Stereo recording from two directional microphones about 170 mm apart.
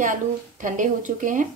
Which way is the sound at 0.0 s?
50° right (ahead or behind).